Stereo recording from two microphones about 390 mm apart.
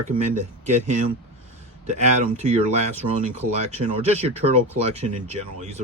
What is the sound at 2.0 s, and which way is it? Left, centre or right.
Speech, centre.